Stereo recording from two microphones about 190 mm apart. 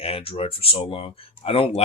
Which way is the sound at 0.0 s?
30° left (ahead or behind).